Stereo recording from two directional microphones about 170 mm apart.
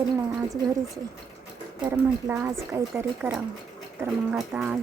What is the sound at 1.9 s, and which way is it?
Speech, 15° right (ahead or behind).